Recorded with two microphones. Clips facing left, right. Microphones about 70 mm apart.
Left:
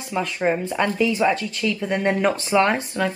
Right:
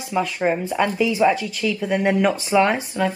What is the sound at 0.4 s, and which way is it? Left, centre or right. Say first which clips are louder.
A woman's voice: left 1 dB; centre.